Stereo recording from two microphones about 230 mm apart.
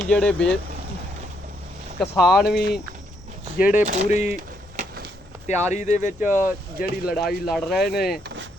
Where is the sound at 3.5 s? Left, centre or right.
Left.